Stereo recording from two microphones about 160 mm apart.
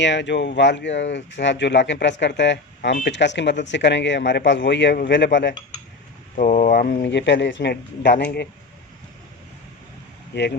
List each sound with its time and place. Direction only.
0.0 s speech: 90° left
6.3 s speech: 50° left (ahead or behind); by 8.4 s 90° left
10.3 s speech: 90° left